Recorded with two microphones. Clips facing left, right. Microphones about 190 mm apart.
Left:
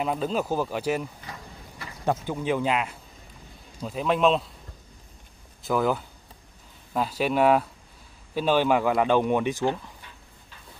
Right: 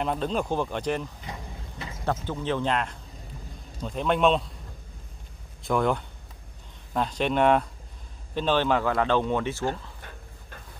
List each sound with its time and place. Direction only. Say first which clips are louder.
0.0 s speech: left 1 dB; 5° left (ahead or behind)
1.2 s vehicle: right 2 dB; 20° right (ahead or behind)
2.0 s speech: left 2 dB; 10° left (ahead or behind)
5.6 s speech: even; centre (ahead or behind)